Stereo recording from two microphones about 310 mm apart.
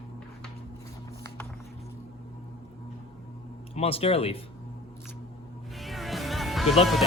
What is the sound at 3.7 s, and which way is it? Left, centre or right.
Speech, centre.